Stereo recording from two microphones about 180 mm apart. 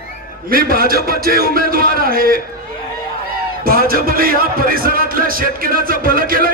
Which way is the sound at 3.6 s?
55° right (ahead or behind).